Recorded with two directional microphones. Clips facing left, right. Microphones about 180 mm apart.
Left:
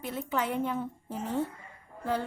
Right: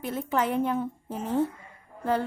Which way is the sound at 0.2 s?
50° right (ahead or behind).